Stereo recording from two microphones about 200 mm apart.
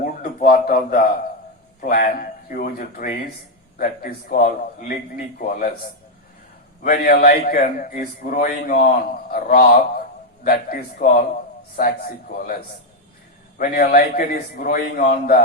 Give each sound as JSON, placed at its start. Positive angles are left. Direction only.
{"t": 0.0, "sound": "a sound", "side_deg": 45}
{"t": 1.8, "sound": "a man's voice", "side_deg": 45}
{"t": 6.8, "sound": "a man's voice", "side_deg": 45}
{"t": 13.6, "sound": "a man's voice", "side_deg": 50}